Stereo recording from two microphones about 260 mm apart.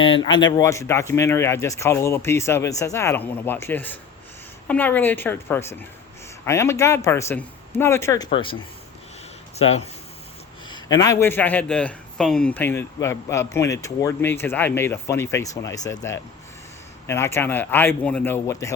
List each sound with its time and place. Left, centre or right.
0.0 s a man's voice: centre
9.6 s a man's voice: left
17.1 s a man's voice: centre